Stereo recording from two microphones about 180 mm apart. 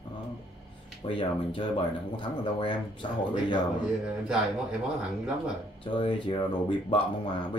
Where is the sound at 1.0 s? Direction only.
30° left (ahead or behind).